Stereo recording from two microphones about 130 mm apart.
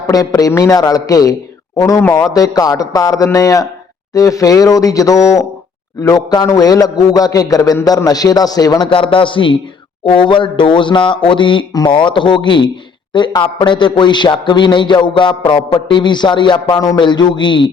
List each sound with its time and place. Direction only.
0.1 s a man's voice: 30° left (ahead or behind)
8.9 s a man's voice: 40° left (ahead or behind)